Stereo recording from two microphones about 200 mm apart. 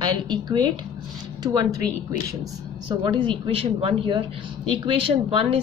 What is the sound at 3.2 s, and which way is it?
Speech, 25° right (ahead or behind).